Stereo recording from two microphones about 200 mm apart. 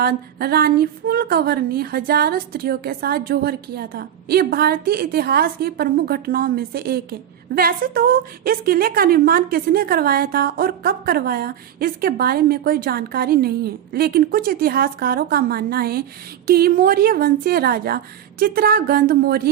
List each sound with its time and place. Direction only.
0.0 s speech: 50° right (ahead or behind)